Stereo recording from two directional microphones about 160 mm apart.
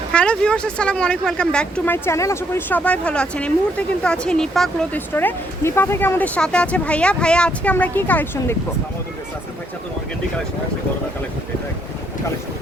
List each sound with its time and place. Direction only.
0.1 s speech: 5° left (ahead or behind)